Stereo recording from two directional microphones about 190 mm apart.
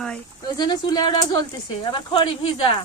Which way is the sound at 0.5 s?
20° left (ahead or behind).